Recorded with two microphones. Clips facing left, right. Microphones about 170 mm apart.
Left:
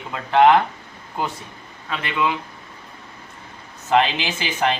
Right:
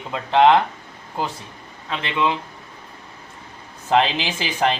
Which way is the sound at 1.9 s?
25° right (ahead or behind).